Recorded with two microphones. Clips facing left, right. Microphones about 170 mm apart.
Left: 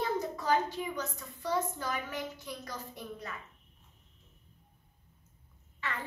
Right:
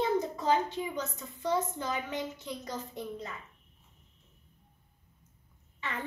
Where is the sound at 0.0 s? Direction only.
20° right (ahead or behind).